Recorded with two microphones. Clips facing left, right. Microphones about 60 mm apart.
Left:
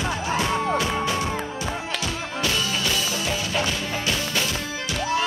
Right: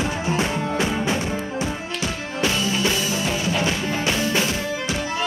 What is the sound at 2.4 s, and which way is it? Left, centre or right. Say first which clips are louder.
Music: right 4 dB; right.